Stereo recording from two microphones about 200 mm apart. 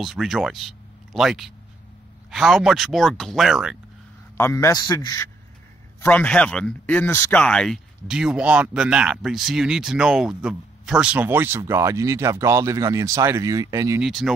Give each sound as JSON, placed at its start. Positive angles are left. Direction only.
{"t": 0.0, "sound": "speech", "side_deg": 0}
{"t": 4.4, "sound": "a man's voice", "side_deg": 15}
{"t": 5.9, "sound": "speech", "side_deg": 5}
{"t": 14.0, "sound": "speech", "side_deg": 0}